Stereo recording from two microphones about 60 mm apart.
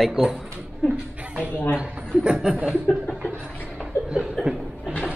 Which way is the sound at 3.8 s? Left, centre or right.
Centre.